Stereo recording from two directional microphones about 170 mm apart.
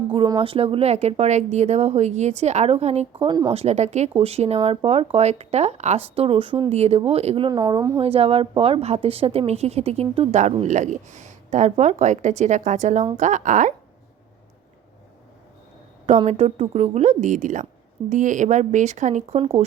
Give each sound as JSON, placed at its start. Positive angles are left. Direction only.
{"t": 0.1, "sound": "a woman's voice", "side_deg": -30}
{"t": 3.5, "sound": "a woman's voice", "side_deg": -40}
{"t": 8.0, "sound": "a woman's voice", "side_deg": -35}
{"t": 16.0, "sound": "a woman's voice", "side_deg": -40}